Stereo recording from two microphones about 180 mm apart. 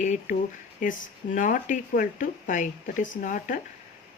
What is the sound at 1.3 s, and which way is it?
Speech, 45° left (ahead or behind).